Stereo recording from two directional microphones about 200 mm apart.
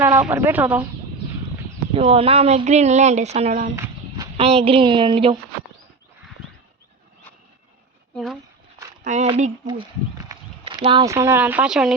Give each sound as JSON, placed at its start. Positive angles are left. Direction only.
{"t": 0.0, "sound": "speech", "side_deg": -10}
{"t": 1.9, "sound": "a woman's voice", "side_deg": -30}
{"t": 8.1, "sound": "a sound", "side_deg": 0}
{"t": 9.0, "sound": "speech", "side_deg": -35}
{"t": 10.3, "sound": "a sound", "side_deg": -15}
{"t": 10.8, "sound": "speech", "side_deg": -20}